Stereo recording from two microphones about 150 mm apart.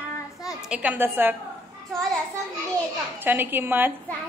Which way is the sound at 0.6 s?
10° right (ahead or behind).